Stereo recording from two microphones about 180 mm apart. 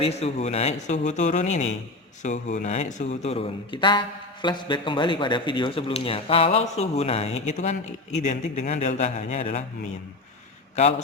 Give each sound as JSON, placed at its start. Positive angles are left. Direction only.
{"t": 0.0, "sound": "speech", "side_deg": 35}